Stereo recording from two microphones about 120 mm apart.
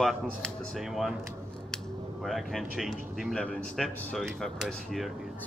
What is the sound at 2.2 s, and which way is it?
Speech, centre (ahead or behind).